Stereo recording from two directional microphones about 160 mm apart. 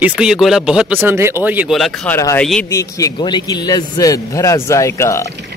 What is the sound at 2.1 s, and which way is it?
Speech, 20° left (ahead or behind).